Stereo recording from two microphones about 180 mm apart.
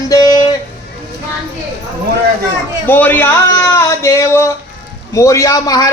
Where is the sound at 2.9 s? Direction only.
10° left (ahead or behind).